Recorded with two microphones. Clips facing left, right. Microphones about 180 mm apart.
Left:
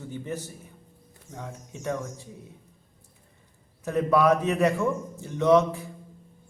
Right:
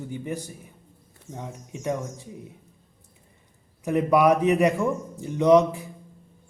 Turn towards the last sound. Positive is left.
turn(degrees=-15)  # may be behind; listen again after turning